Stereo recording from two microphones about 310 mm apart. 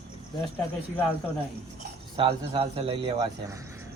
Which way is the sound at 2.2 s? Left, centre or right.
Centre.